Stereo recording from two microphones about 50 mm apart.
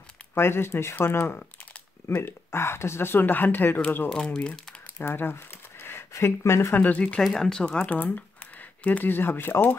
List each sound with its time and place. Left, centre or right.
0.3 s speech: left
4.1 s speech: centre
5.1 s a sound: left
6.1 s speech: left
6.7 s speech: left
7.2 s speech: centre
7.9 s a sound: left
9.0 s speech: left